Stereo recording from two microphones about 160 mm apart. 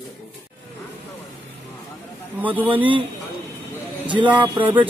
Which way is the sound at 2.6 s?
10° right (ahead or behind).